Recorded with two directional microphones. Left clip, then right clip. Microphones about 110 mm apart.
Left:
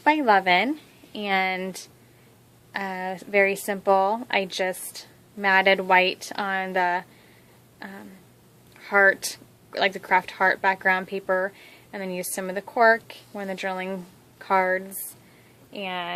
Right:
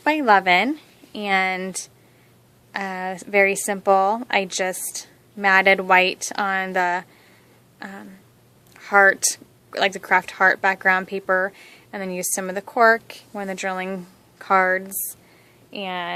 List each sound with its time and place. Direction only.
0.0 s speech: 25° right (ahead or behind)
7.8 s a sound: 30° right (ahead or behind)
8.8 s speech: 30° right (ahead or behind)